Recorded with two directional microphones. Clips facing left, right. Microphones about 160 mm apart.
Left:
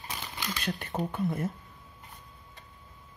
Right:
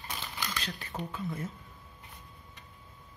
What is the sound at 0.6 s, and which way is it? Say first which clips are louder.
Speech: left 6 dB; 50° left (ahead or behind).